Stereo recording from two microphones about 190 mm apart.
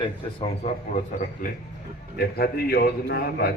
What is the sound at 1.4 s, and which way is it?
Speech, 40° left (ahead or behind).